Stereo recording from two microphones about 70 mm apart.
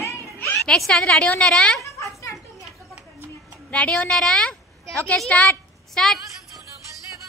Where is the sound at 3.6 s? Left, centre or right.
Centre.